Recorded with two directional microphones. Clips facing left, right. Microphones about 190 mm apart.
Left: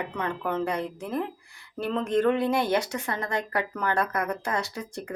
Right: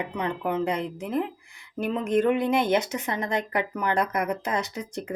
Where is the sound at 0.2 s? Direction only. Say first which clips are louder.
Right 2 dB; 15° right (ahead or behind).